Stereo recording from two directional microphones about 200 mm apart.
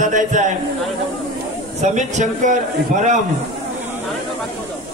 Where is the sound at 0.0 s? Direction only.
40° right (ahead or behind).